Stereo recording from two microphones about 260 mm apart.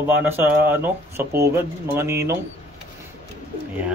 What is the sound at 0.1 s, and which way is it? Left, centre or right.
Speech, centre.